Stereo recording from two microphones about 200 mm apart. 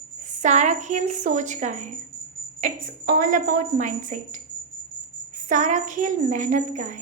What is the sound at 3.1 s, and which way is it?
Speech, 45° right (ahead or behind).